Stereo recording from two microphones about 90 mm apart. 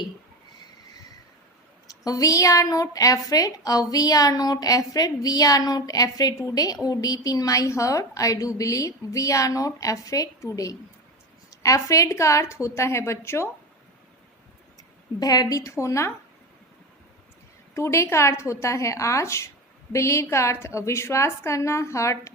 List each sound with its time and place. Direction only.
1.9 s a woman's voice: 40° left (ahead or behind)
15.2 s a woman's voice: 45° left (ahead or behind)
17.7 s a woman's voice: 30° left (ahead or behind)